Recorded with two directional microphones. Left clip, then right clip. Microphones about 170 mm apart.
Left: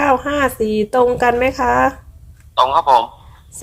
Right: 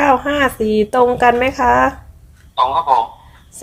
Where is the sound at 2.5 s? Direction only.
80° left.